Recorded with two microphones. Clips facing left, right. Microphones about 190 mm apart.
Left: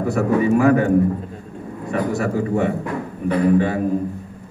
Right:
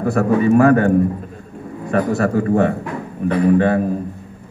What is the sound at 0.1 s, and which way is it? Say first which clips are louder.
Speech: right 3 dB; 55° right (ahead or behind).